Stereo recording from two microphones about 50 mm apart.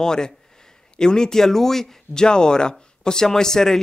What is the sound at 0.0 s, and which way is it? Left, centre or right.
Speech, centre.